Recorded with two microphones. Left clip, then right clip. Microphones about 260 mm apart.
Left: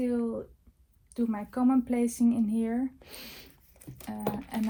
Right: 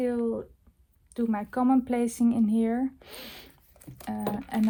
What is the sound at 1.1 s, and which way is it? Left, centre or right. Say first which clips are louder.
Speech: right 3 dB; right.